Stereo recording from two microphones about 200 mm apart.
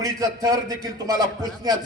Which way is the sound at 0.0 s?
15° right (ahead or behind).